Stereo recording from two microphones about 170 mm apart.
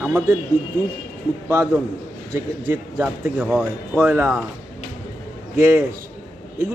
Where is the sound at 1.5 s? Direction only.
15° right (ahead or behind).